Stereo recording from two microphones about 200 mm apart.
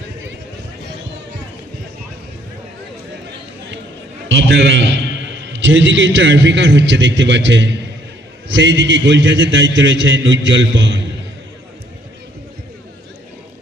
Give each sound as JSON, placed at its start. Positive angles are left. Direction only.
{"t": 4.3, "sound": "a man's voice", "side_deg": -65}